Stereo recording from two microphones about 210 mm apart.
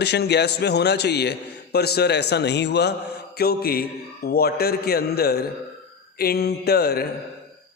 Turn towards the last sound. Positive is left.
turn(degrees=50)  # may be behind; listen again after turning